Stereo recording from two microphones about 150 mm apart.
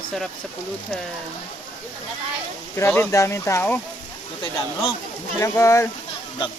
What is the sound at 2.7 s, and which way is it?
Speech, 15° left (ahead or behind).